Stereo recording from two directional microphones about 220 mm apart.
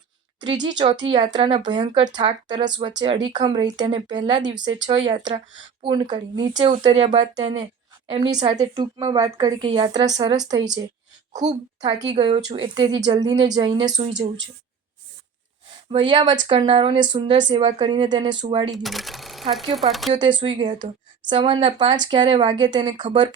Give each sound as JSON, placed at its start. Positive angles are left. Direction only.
{"t": 0.3, "sound": "a woman's voice", "side_deg": -20}
{"t": 15.9, "sound": "speech", "side_deg": -20}
{"t": 18.8, "sound": "speech", "side_deg": 0}
{"t": 20.1, "sound": "speech", "side_deg": -20}